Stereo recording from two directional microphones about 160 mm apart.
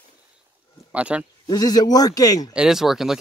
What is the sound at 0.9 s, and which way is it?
Speech, 5° right (ahead or behind).